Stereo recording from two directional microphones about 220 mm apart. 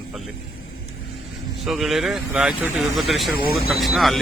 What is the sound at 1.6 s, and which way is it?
Speech, centre (ahead or behind).